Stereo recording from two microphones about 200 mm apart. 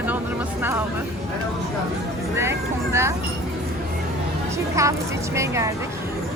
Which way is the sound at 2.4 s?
10° right (ahead or behind).